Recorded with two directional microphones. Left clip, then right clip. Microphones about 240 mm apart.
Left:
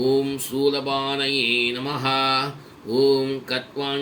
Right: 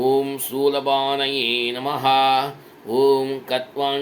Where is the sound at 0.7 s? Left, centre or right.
Centre.